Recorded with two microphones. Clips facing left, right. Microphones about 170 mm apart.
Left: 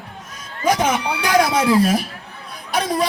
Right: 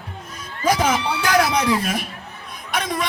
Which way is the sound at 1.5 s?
5° left (ahead or behind).